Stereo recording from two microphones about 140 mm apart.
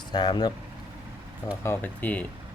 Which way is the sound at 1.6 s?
15° left (ahead or behind).